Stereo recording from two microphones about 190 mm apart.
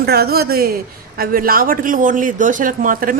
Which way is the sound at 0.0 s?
55° right (ahead or behind).